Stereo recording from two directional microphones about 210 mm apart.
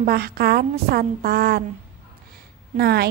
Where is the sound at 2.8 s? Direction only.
50° right (ahead or behind).